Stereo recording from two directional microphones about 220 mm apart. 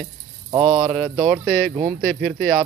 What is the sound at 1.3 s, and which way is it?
Speech, 5° left (ahead or behind).